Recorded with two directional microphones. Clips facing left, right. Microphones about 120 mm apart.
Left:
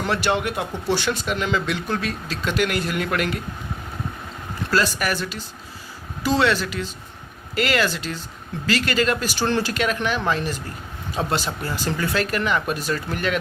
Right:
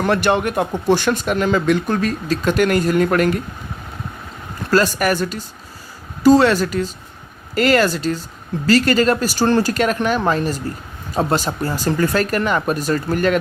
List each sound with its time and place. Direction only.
0.0 s speech: 50° right (ahead or behind)
4.7 s speech: 45° right (ahead or behind)